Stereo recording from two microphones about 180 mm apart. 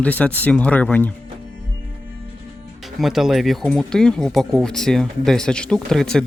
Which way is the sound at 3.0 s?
Centre (ahead or behind).